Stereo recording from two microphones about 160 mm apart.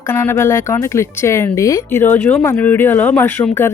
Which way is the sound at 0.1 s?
15° left (ahead or behind).